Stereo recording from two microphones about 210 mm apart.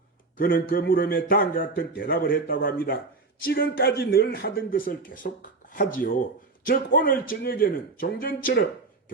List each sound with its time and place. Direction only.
0.3 s a man's voice: 45° left (ahead or behind)